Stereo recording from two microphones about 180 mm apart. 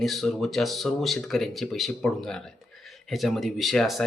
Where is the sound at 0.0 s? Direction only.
Centre (ahead or behind).